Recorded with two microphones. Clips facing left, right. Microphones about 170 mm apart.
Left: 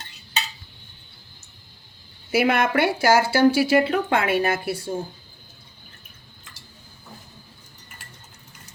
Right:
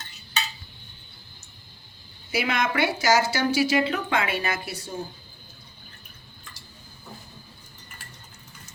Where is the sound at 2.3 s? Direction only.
60° left (ahead or behind).